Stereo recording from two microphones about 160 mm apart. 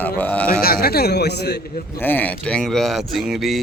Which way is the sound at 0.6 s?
70° left (ahead or behind).